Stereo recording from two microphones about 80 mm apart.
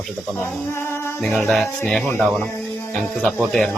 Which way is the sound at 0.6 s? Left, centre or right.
Left.